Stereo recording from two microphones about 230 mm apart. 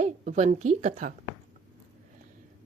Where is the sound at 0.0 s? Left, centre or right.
Right.